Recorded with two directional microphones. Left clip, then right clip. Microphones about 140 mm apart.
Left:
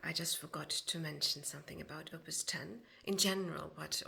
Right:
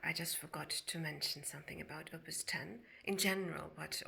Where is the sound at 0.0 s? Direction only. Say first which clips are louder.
Left 1 dB; 40° left (ahead or behind).